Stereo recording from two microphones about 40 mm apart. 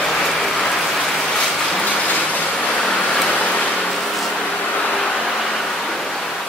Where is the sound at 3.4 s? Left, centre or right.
Left.